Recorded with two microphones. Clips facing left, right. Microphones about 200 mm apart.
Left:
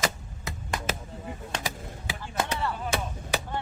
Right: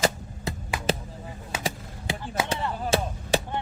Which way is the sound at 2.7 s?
35° right (ahead or behind).